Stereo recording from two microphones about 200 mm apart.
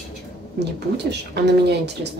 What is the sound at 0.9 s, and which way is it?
Speech, 55° right (ahead or behind).